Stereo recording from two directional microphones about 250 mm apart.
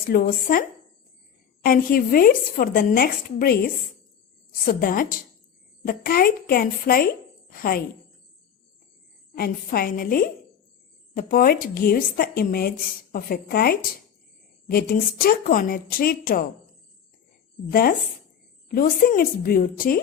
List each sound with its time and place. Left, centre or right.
0.1 s speech: left
1.6 s speech: left
9.3 s speech: left
17.7 s speech: left